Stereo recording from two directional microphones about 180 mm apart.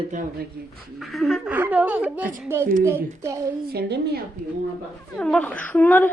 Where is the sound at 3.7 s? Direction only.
65° right (ahead or behind).